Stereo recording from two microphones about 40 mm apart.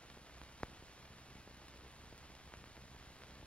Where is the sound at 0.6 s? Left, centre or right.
Left.